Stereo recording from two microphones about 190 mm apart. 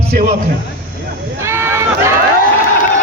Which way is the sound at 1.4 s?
15° right (ahead or behind).